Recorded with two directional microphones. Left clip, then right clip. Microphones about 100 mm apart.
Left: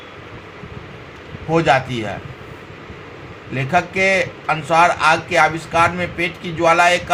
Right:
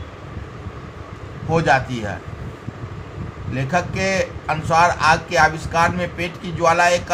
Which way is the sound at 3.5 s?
50° left (ahead or behind).